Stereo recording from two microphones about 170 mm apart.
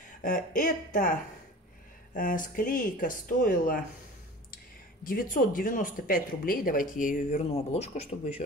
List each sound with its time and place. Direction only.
0.6 s speech: 45° left (ahead or behind)
2.1 s speech: 50° left (ahead or behind)
5.0 s speech: 55° left (ahead or behind); by 8.4 s 40° left (ahead or behind)